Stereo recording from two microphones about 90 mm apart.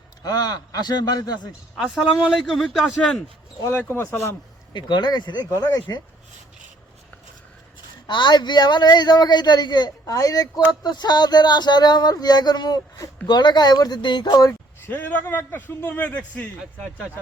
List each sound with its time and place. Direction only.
0.2 s speech: 45° left (ahead or behind)
1.7 s a man's voice: 10° right (ahead or behind)
3.6 s a man's voice: 30° left (ahead or behind)
4.7 s speech: 55° left (ahead or behind); by 6.0 s 40° left (ahead or behind)
8.0 s speech: 60° left (ahead or behind)
14.8 s a man's voice: 20° left (ahead or behind)